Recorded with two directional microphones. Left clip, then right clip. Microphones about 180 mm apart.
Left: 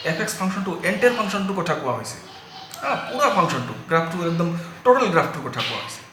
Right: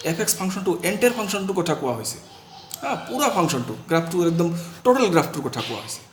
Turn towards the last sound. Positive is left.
turn(degrees=-55)  # may be behind; listen again after turning